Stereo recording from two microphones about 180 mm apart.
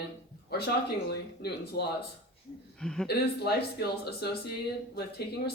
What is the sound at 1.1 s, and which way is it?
Speech, 65° left (ahead or behind).